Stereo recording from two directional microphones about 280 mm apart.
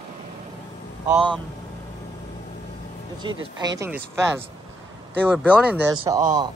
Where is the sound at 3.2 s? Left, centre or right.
Centre.